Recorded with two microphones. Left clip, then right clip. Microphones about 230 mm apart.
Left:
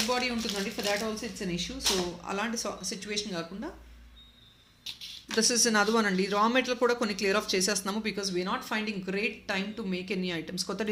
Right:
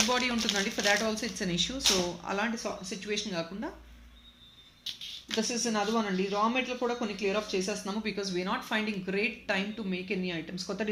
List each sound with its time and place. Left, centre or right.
0.1 s speech: centre
2.2 s speech: centre
5.4 s speech: left
8.0 s speech: centre